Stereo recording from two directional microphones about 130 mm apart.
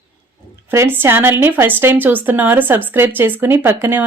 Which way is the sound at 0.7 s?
20° right (ahead or behind).